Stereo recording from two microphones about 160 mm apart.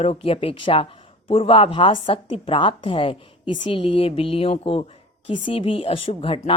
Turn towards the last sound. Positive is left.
turn(degrees=35)  # may be behind; listen again after turning